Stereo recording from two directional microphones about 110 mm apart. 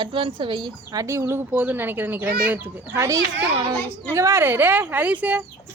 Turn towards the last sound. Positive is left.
turn(degrees=-15)  # may be behind; listen again after turning